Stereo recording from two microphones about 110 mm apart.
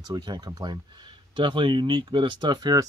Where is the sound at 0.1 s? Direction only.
40° right (ahead or behind).